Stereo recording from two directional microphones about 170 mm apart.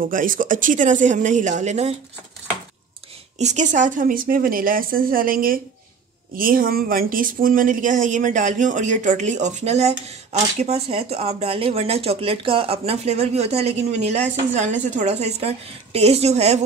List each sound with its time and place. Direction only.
0.0 s speech: 55° right (ahead or behind)
3.3 s speech: 45° right (ahead or behind)